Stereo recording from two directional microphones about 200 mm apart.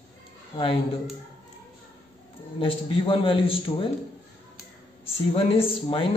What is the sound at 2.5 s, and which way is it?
Speech, 25° left (ahead or behind).